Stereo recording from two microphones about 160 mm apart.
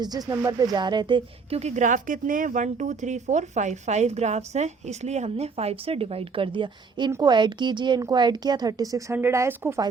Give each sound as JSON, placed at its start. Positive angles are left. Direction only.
{"t": 0.0, "sound": "a woman's voice", "side_deg": -25}